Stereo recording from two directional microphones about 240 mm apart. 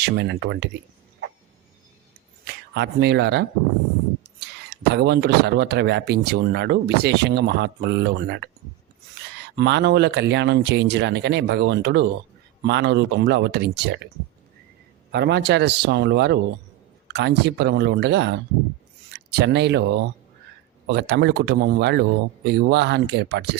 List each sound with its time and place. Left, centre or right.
0.0 s speech: right
2.4 s speech: right
15.1 s speech: right